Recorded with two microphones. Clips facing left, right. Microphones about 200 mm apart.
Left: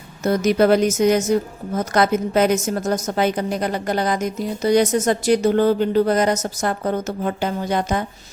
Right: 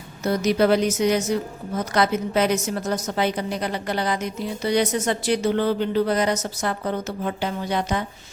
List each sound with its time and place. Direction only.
0.3 s a woman's voice: 50° left (ahead or behind)